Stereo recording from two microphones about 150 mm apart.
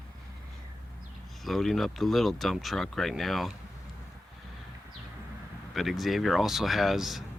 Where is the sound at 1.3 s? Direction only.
Centre (ahead or behind).